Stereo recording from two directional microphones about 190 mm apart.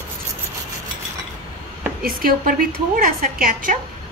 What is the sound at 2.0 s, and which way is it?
A woman's voice, 50° right (ahead or behind).